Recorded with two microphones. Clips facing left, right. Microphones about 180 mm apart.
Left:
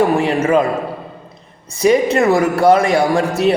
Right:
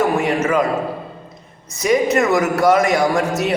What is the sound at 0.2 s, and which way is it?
Speech, 30° left (ahead or behind).